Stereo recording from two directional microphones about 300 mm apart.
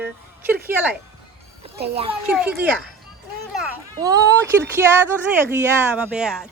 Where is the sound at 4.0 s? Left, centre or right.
Centre.